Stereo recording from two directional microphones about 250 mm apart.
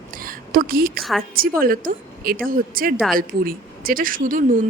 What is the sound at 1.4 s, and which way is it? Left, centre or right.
A woman's voice, right.